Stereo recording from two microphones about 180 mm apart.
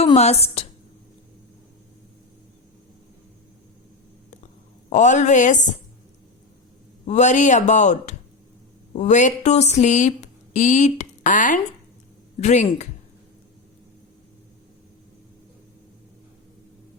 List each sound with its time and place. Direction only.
0.0 s a woman's voice: 35° left (ahead or behind)
4.9 s speech: 45° left (ahead or behind)
7.1 s speech: 40° left (ahead or behind)